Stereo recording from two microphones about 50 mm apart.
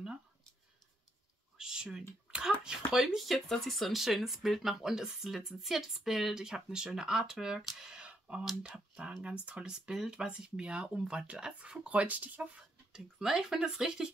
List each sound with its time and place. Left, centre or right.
1.6 s a sound: centre
2.6 s speech: centre
8.5 s speech: centre
9.0 s speech: right
12.9 s speech: centre